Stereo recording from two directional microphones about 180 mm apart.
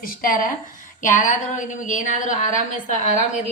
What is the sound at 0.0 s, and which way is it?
Speech, 50° left (ahead or behind).